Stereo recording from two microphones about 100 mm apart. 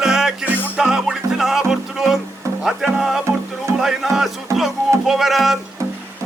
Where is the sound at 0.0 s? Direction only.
5° right (ahead or behind).